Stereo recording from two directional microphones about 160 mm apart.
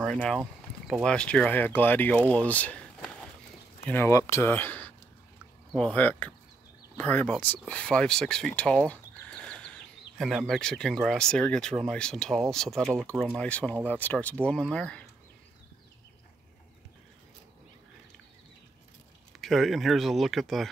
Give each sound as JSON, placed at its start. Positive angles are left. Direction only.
{"t": 0.0, "sound": "speech", "side_deg": 5}
{"t": 12.9, "sound": "speech", "side_deg": -20}
{"t": 13.4, "sound": "speech", "side_deg": 10}
{"t": 19.3, "sound": "speech", "side_deg": 0}